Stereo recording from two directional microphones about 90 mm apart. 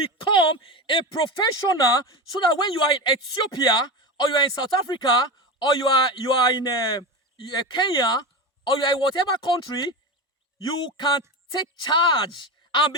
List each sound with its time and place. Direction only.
0.0 s speech: 80° left; by 9.9 s 55° left (ahead or behind)
10.9 s speech: 55° left (ahead or behind)